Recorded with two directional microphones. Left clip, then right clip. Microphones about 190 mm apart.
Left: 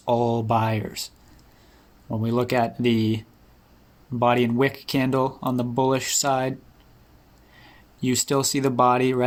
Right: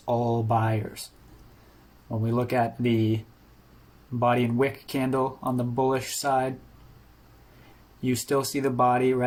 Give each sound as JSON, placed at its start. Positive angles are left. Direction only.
{"t": 0.1, "sound": "speech", "side_deg": 50}
{"t": 2.3, "sound": "speech", "side_deg": 50}
{"t": 4.2, "sound": "speech", "side_deg": 55}
{"t": 8.1, "sound": "speech", "side_deg": 50}